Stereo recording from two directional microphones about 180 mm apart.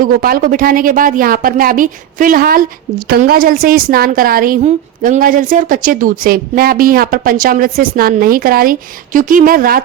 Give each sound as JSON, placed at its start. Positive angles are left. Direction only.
{"t": 0.0, "sound": "a woman's voice", "side_deg": -50}